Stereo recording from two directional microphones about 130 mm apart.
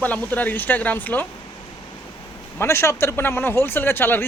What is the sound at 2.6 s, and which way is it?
A man's voice, 20° left (ahead or behind).